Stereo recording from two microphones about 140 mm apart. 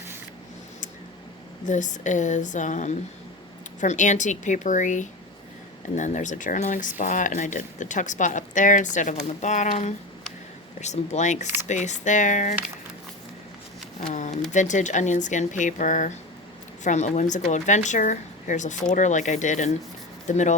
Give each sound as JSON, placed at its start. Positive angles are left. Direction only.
{"t": 1.6, "sound": "speech", "side_deg": 60}
{"t": 14.1, "sound": "speech", "side_deg": 60}